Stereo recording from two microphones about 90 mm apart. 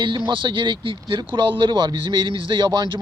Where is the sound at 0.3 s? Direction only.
65° right (ahead or behind).